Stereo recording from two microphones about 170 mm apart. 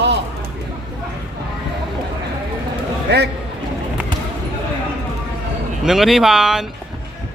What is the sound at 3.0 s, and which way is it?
Speech, 75° right (ahead or behind).